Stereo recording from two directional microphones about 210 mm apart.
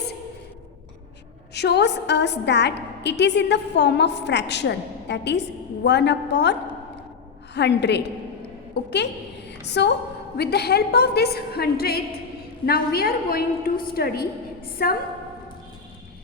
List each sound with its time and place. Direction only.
1.5 s a woman's voice: 55° left (ahead or behind)
8.7 s a sound: 55° left (ahead or behind)
9.6 s a woman's voice: 55° left (ahead or behind)